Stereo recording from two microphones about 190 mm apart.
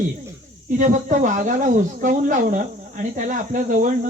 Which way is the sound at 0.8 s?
40° right (ahead or behind).